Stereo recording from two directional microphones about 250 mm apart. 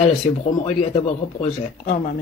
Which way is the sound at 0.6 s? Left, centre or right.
Left.